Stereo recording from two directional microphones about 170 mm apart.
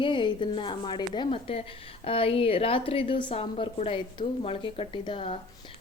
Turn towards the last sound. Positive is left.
turn(degrees=30)  # may be behind; listen again after turning